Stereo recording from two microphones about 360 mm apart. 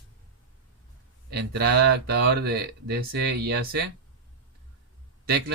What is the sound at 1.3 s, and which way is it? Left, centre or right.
Speech, right.